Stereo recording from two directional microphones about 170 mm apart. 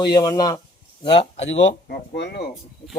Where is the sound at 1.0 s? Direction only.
35° left (ahead or behind).